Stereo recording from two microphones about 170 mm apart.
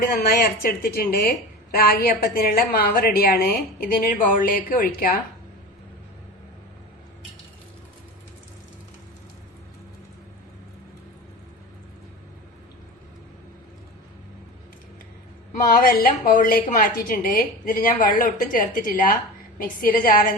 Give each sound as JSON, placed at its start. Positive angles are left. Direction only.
{"t": 0.0, "sound": "a woman's voice", "side_deg": 65}
{"t": 15.8, "sound": "a woman's voice", "side_deg": 60}